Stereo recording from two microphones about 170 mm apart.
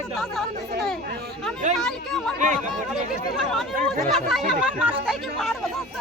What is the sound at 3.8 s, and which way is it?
Speech, centre (ahead or behind).